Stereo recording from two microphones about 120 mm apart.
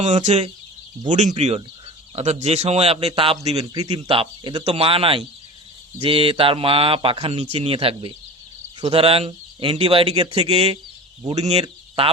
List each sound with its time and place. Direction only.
0.0 s speech: 75° right (ahead or behind)
1.0 s a man's voice: 90° right; by 3.6 s 55° right (ahead or behind)
4.1 s a man's voice: 45° right (ahead or behind); by 11.6 s 65° right (ahead or behind)